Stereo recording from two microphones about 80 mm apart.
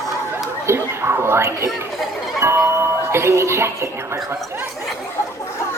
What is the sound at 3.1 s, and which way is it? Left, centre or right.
Speech, right.